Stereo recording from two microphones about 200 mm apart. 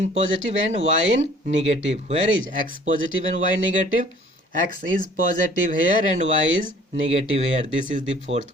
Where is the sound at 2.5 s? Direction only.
40° right (ahead or behind).